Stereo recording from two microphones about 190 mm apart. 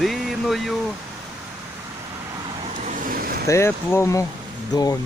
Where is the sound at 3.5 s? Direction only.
15° left (ahead or behind).